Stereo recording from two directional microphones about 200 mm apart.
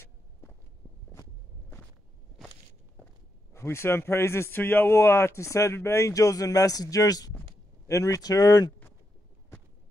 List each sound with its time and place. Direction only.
2.4 s walk: centre (ahead or behind)
3.5 s speech: 10° left (ahead or behind)